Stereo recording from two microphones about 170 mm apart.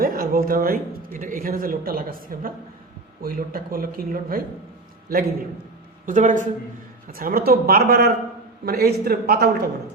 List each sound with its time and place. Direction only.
0.0 s a man's voice: 60° right (ahead or behind)
6.1 s speech: 50° right (ahead or behind)
7.1 s a man's voice: 60° right (ahead or behind)